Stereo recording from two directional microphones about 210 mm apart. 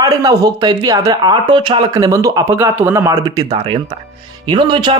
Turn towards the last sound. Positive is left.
turn(degrees=-20)  # may be behind; listen again after turning